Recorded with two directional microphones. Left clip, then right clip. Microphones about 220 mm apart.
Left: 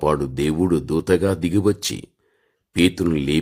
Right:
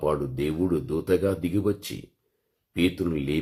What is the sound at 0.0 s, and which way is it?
Speech, 45° left (ahead or behind).